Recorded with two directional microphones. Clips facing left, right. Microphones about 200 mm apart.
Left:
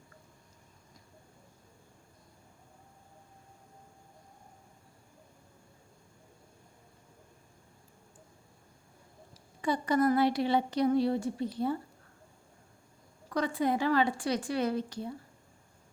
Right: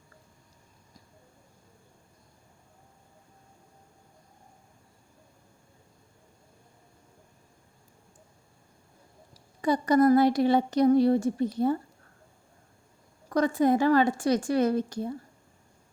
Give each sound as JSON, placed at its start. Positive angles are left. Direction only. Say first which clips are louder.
{"t": 9.6, "sound": "speech", "louder": "right 6 dB", "side_deg": -40}
{"t": 13.3, "sound": "speech", "louder": "right 7 dB", "side_deg": -45}